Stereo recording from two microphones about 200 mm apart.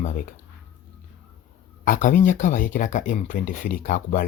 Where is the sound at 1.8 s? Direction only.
40° left (ahead or behind).